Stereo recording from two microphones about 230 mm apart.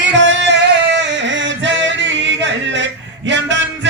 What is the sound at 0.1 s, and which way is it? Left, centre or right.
Music, right.